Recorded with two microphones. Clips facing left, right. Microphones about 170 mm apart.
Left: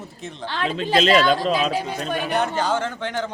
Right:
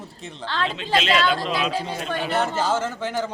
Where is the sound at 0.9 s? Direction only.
40° left (ahead or behind).